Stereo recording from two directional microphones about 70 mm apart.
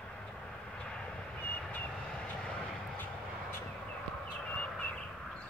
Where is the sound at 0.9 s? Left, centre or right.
Centre.